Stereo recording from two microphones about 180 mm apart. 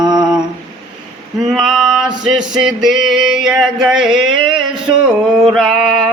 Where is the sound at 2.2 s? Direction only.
5° right (ahead or behind).